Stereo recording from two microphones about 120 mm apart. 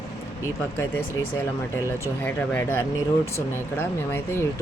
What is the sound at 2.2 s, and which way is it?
Speech, 15° left (ahead or behind).